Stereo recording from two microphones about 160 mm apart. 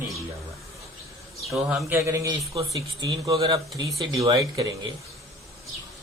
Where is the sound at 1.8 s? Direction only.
15° right (ahead or behind).